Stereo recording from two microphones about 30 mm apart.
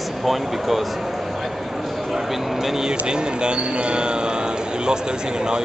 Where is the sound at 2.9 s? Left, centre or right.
Right.